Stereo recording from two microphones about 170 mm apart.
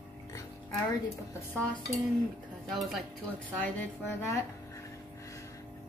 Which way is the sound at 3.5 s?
15° left (ahead or behind).